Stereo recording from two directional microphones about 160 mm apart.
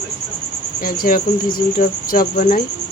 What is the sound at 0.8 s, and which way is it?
Cricket, 60° left (ahead or behind).